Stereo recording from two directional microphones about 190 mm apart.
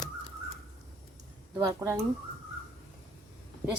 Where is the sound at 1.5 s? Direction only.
15° right (ahead or behind).